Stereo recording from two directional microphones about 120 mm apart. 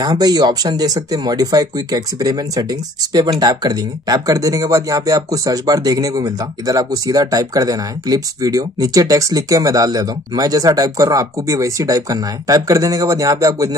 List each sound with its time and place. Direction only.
0.0 s speech: 35° right (ahead or behind)